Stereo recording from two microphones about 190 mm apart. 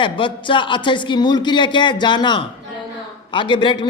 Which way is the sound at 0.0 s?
25° left (ahead or behind).